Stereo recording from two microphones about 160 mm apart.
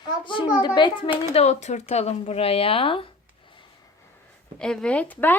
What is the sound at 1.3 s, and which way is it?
Speech, 40° left (ahead or behind).